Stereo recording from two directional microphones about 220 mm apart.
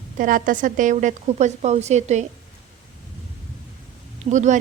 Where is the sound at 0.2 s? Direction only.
40° right (ahead or behind).